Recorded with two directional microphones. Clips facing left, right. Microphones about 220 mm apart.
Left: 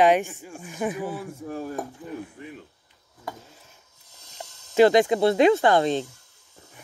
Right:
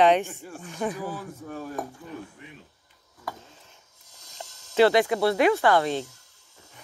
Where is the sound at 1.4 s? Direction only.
30° left (ahead or behind).